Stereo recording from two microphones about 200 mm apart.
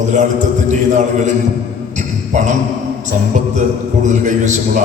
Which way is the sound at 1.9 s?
35° right (ahead or behind).